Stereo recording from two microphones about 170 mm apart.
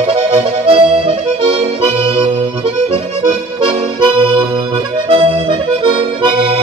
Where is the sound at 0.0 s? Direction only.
35° right (ahead or behind).